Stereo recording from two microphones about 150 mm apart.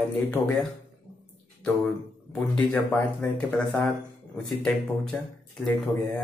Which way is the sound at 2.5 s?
10° left (ahead or behind).